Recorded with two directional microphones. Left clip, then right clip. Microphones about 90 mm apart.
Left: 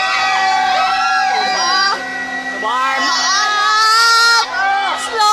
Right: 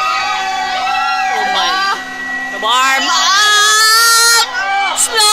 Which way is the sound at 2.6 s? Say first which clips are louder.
Right 4 dB; 40° right (ahead or behind).